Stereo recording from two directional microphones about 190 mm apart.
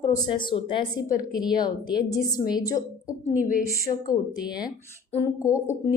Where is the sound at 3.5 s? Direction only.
50° left (ahead or behind).